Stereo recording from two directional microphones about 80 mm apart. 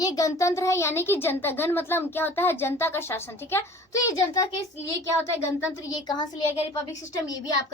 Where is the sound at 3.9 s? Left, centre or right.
Left.